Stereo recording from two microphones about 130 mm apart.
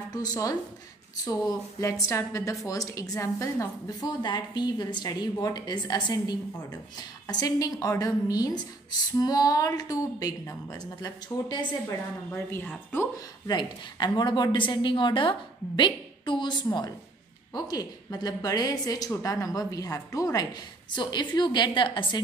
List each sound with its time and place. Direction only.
0.1 s a woman's voice: 30° left (ahead or behind)
12.3 s speech: 15° left (ahead or behind)
13.5 s a woman's voice: 35° left (ahead or behind)